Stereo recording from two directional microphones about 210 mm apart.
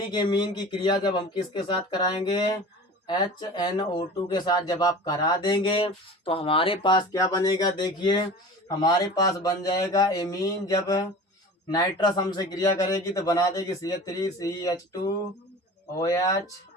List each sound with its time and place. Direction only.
0.1 s speech: 20° left (ahead or behind)